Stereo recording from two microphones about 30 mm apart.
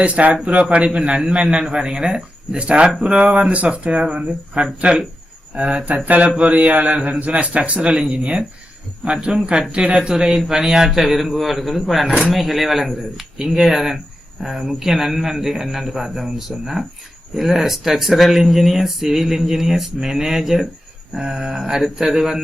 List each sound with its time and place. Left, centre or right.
0.0 s speech: right
2.6 s speech: right
3.5 s speech: right
6.4 s mantra: right
7.4 s speech: right
10.0 s speech: right